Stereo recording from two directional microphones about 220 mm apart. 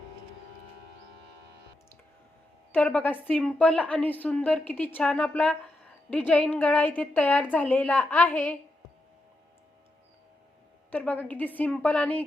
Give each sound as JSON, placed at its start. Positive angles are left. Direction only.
{"t": 2.7, "sound": "a woman's voice", "side_deg": 5}
{"t": 10.9, "sound": "a woman's voice", "side_deg": 5}